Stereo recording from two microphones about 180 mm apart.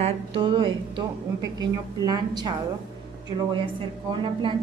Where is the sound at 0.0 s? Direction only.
30° right (ahead or behind).